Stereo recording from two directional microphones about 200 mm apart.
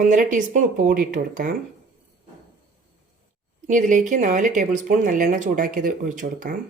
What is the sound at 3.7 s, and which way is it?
Speech, 40° right (ahead or behind).